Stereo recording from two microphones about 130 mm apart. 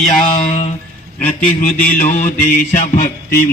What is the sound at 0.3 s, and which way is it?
Mantra, 60° left (ahead or behind).